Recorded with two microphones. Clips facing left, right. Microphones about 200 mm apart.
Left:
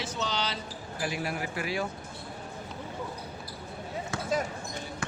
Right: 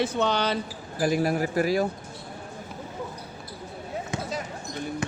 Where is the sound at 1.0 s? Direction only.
40° right (ahead or behind).